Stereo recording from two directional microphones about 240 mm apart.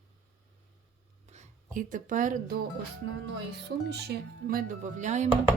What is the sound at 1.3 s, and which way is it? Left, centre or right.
Speech, right.